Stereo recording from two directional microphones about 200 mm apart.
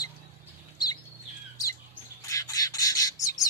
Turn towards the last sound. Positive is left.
turn(degrees=15)  # may be behind; listen again after turning